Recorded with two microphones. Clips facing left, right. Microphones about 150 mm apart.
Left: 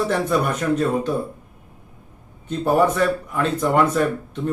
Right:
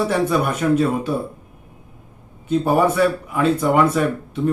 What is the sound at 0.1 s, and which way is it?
Speech, 5° right (ahead or behind).